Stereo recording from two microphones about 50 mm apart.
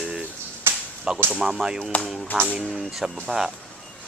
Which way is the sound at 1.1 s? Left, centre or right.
Centre.